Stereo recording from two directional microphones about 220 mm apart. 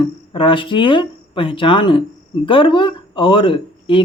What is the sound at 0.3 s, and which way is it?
Speech, 25° left (ahead or behind).